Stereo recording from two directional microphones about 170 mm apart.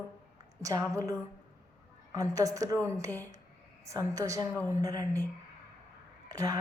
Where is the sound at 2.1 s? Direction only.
20° right (ahead or behind).